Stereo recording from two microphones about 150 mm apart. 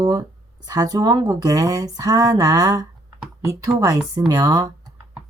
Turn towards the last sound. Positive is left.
turn(degrees=-25)  # may be behind; listen again after turning